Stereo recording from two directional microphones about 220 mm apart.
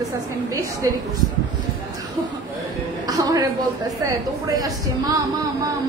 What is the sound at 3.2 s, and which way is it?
Speech, 15° right (ahead or behind).